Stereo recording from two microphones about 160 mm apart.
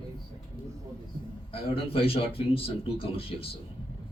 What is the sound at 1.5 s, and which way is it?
A man's voice, 35° left (ahead or behind).